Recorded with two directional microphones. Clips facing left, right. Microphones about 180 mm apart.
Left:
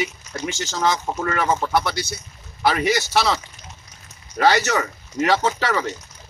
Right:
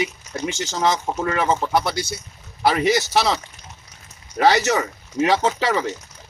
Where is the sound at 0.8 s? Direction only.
25° right (ahead or behind).